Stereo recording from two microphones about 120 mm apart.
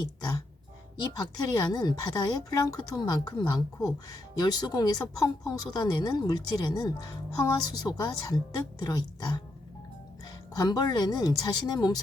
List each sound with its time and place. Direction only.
0.2 s speech: 35° left (ahead or behind)
10.5 s speech: 35° left (ahead or behind)